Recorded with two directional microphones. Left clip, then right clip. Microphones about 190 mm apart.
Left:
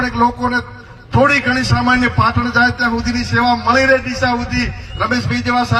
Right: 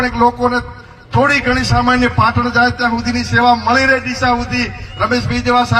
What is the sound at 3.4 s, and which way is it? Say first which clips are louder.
Speech: right 3 dB; 40° left (ahead or behind).